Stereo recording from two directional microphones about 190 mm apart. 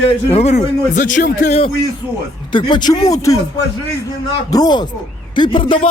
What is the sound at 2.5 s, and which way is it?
Speech, 25° left (ahead or behind).